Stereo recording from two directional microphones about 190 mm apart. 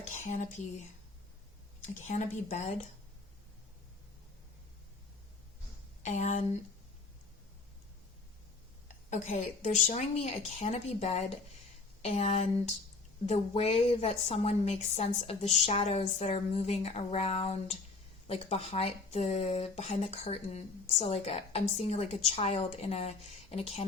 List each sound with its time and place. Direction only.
0.1 s whispering: 40° left (ahead or behind)
1.9 s a woman's voice: 40° left (ahead or behind)
6.0 s a woman's voice: 40° left (ahead or behind)
9.0 s a woman's voice: 40° left (ahead or behind)